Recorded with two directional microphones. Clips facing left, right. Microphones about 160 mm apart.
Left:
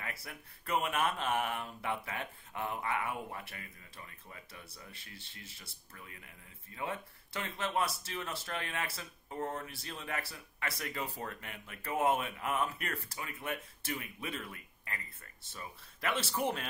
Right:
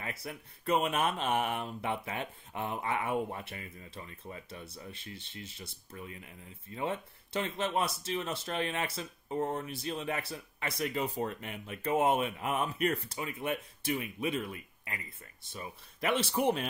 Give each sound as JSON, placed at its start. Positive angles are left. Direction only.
{"t": 0.0, "sound": "speech", "side_deg": -20}